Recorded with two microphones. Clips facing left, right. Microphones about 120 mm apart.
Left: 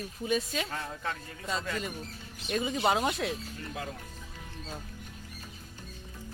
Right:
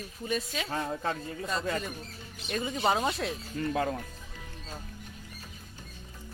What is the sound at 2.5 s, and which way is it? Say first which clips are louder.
Speech: left 1 dB; centre (ahead or behind).